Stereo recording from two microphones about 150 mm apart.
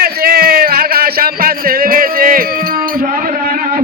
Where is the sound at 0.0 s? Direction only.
90° right; by 2.5 s 75° right (ahead or behind).